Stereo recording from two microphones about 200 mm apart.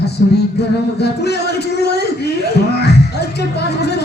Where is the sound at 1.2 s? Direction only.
55° left (ahead or behind).